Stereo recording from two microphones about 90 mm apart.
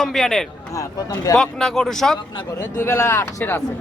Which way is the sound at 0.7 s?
40° left (ahead or behind).